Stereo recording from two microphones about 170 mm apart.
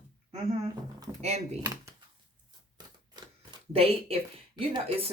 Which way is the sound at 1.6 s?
15° right (ahead or behind).